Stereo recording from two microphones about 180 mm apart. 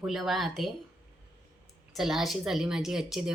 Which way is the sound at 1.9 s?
Centre (ahead or behind).